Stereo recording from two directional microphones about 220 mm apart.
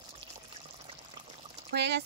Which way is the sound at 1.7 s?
50° right (ahead or behind).